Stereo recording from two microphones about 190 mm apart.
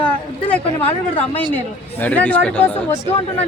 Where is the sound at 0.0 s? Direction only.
5° left (ahead or behind).